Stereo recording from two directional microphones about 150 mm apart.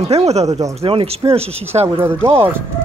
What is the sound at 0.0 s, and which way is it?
Speech, 45° right (ahead or behind).